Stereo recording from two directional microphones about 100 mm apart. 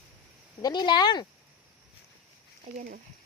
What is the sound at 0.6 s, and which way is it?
Speech, 45° left (ahead or behind).